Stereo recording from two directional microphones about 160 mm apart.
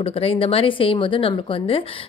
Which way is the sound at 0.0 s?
35° left (ahead or behind).